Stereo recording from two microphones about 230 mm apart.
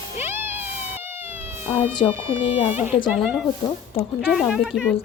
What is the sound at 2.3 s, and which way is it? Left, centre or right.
Speech, left.